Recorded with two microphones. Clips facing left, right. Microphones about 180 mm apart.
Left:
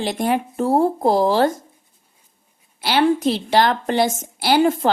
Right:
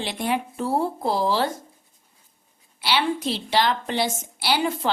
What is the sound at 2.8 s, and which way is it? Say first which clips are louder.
A woman's voice: left 7 dB; 45° left (ahead or behind).